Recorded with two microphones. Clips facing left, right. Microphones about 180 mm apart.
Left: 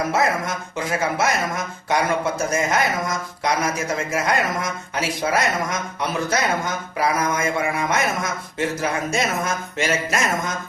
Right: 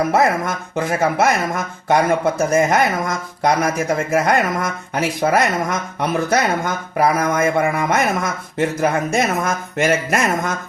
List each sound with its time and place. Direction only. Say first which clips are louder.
0.1 s speech: right 4 dB; 55° right (ahead or behind)